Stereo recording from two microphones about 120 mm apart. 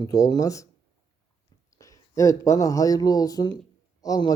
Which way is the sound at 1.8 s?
25° left (ahead or behind).